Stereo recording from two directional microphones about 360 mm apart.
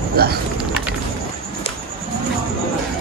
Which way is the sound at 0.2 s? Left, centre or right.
Right.